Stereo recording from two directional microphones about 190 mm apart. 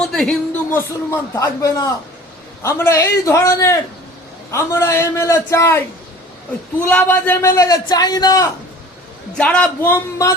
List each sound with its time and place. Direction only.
0.0 s speech: 5° left (ahead or behind); by 8.4 s 20° left (ahead or behind)
9.4 s speech: 5° left (ahead or behind)